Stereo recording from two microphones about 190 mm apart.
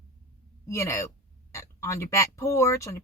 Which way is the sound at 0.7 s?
15° left (ahead or behind).